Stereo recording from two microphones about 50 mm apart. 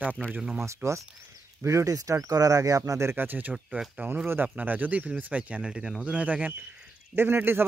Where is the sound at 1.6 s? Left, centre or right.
Right.